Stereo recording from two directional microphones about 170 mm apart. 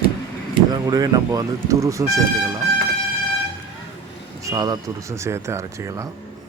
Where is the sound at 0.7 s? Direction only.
25° right (ahead or behind).